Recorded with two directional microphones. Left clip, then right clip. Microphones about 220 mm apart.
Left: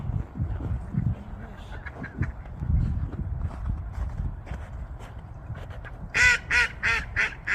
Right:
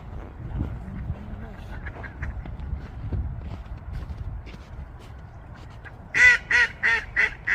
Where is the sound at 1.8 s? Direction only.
25° left (ahead or behind).